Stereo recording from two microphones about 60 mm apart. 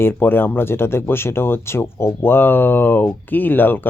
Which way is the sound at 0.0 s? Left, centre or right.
Left.